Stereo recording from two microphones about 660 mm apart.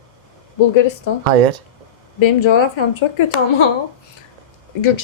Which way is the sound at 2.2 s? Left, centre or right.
Left.